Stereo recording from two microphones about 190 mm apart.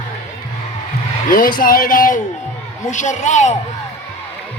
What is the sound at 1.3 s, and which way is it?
A man's voice, 50° left (ahead or behind).